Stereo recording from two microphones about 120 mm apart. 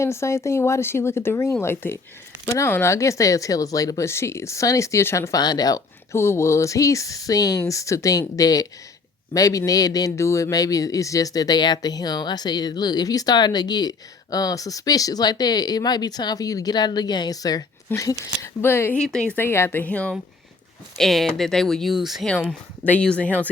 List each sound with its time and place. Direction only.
0.0 s speech: 25° left (ahead or behind)
18.9 s speech: 5° left (ahead or behind)
22.3 s speech: 10° left (ahead or behind)